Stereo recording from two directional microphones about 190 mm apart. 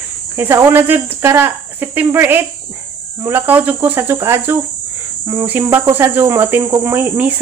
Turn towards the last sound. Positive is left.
turn(degrees=-10)  # may be behind; listen again after turning